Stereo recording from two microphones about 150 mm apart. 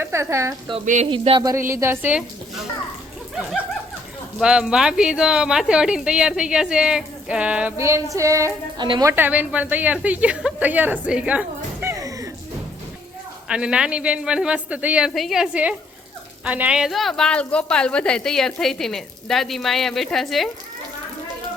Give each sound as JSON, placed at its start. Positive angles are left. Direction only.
{"t": 0.0, "sound": "speech", "side_deg": -20}
{"t": 1.1, "sound": "a woman's voice", "side_deg": -35}
{"t": 7.8, "sound": "speech", "side_deg": -20}
{"t": 9.1, "sound": "a woman's voice", "side_deg": -10}
{"t": 13.5, "sound": "a woman's voice", "side_deg": -5}